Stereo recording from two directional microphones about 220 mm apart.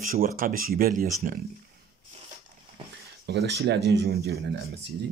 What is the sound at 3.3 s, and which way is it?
Speech, 50° right (ahead or behind).